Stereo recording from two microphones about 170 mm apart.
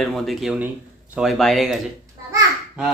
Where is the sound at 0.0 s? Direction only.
Centre (ahead or behind).